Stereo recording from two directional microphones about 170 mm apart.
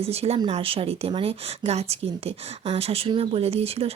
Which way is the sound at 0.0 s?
35° right (ahead or behind).